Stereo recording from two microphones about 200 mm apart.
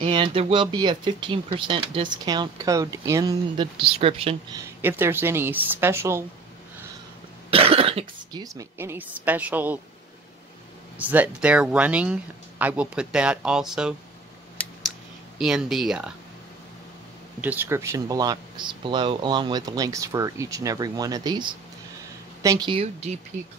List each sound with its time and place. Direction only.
0.0 s speech: 25° right (ahead or behind)
4.6 s speech: 10° right (ahead or behind)
7.5 s speech: 30° right (ahead or behind); by 9.8 s 10° right (ahead or behind)
11.0 s speech: 10° right (ahead or behind)
15.3 s speech: centre (ahead or behind)
17.4 s speech: 10° right (ahead or behind); by 23.1 s 30° right (ahead or behind)